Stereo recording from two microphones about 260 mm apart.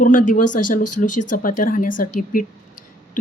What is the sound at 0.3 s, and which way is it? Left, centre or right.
Speech, left.